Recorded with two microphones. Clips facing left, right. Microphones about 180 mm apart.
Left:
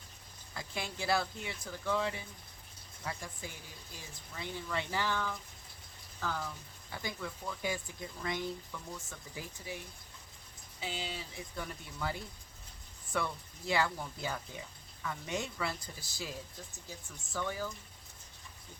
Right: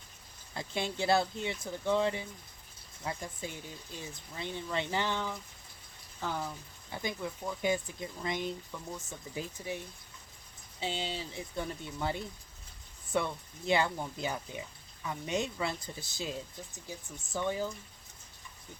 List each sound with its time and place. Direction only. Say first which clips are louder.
0.5 s speech: right 6 dB; 25° right (ahead or behind)
17.3 s speech: right 4 dB; 20° right (ahead or behind)